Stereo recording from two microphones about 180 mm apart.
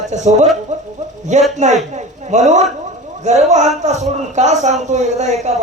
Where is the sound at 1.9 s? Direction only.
40° right (ahead or behind).